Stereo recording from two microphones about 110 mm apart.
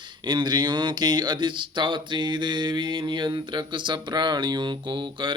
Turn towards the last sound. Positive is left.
turn(degrees=-45)  # may be behind; listen again after turning